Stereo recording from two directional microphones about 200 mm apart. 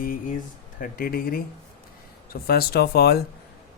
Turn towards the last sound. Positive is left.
turn(degrees=50)  # may be behind; listen again after turning